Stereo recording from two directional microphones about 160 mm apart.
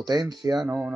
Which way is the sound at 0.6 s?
10° right (ahead or behind).